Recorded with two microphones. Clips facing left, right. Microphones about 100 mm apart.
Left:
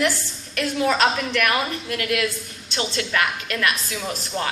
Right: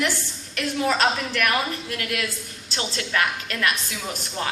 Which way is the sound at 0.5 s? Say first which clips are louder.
Left 2 dB; 30° right (ahead or behind).